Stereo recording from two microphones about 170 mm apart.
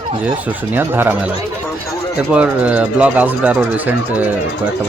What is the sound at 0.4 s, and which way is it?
Speech, 10° right (ahead or behind).